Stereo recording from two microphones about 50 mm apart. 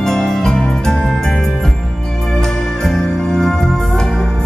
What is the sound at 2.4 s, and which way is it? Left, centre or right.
Music, centre.